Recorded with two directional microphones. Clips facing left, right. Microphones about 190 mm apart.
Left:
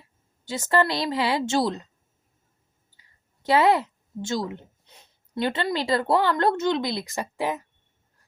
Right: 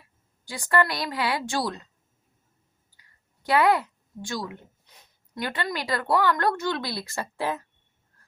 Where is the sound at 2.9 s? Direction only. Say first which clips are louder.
Even; 25° left (ahead or behind).